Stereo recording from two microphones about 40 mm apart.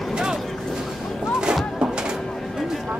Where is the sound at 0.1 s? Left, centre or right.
Centre.